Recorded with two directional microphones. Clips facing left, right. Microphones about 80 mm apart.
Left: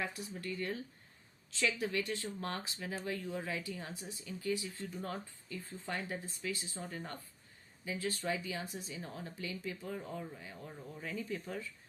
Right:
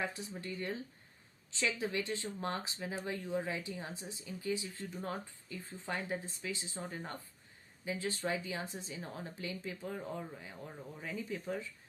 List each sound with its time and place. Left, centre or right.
0.0 s speech: right